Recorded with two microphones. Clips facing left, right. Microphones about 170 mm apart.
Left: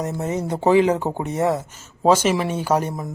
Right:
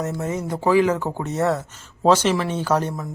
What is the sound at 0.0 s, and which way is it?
Speech, 20° left (ahead or behind).